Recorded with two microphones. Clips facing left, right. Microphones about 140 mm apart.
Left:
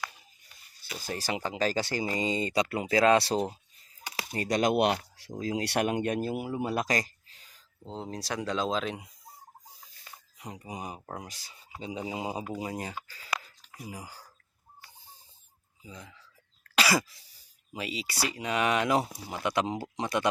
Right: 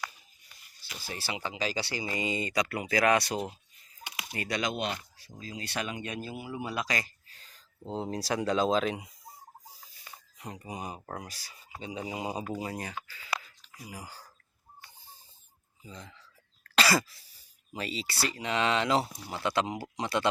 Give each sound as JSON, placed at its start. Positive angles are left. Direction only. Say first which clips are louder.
{"t": 1.0, "sound": "speech", "louder": "left 4 dB", "side_deg": 45}
{"t": 2.1, "sound": "speech", "louder": "left 1 dB", "side_deg": 30}
{"t": 4.3, "sound": "speech", "louder": "left 6 dB", "side_deg": 45}
{"t": 4.7, "sound": "speech", "louder": "left 9 dB", "side_deg": 70}
{"t": 7.3, "sound": "a sound", "louder": "right 2 dB", "side_deg": 15}
{"t": 7.9, "sound": "speech", "louder": "right 4 dB", "side_deg": -5}
{"t": 10.3, "sound": "speech", "louder": "even", "side_deg": 10}
{"t": 11.2, "sound": "speech", "louder": "even", "side_deg": 20}
{"t": 13.1, "sound": "speech", "louder": "even", "side_deg": 35}
{"t": 13.7, "sound": "speech", "louder": "left 2 dB", "side_deg": 20}
{"t": 15.8, "sound": "speech", "louder": "even", "side_deg": 10}
{"t": 16.7, "sound": "cough", "louder": "even", "side_deg": 15}
{"t": 17.7, "sound": "speech", "louder": "even", "side_deg": 10}